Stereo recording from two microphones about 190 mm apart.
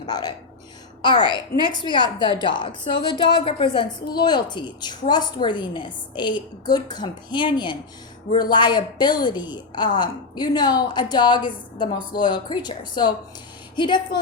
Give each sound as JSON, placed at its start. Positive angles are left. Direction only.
{"t": 0.1, "sound": "a woman's voice", "side_deg": 20}
{"t": 1.2, "sound": "a woman's voice", "side_deg": -20}
{"t": 1.6, "sound": "a woman's voice", "side_deg": 25}